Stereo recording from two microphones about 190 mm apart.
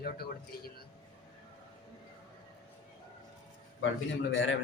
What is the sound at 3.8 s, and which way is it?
Speech, 80° left.